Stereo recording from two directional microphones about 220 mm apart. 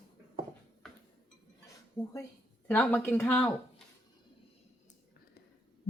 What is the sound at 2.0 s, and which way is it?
Speech, 15° left (ahead or behind).